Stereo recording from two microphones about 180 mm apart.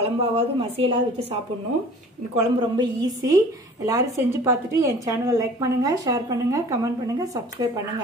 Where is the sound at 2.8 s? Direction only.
20° right (ahead or behind).